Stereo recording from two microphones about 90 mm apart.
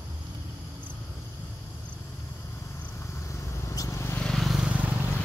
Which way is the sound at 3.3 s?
30° left (ahead or behind).